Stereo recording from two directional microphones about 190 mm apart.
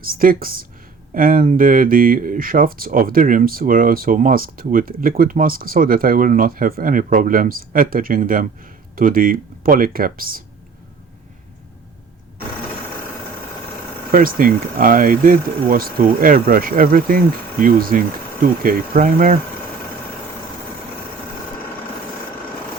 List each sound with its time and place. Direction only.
0.0 s speech: 50° right (ahead or behind)
14.1 s speech: 45° right (ahead or behind)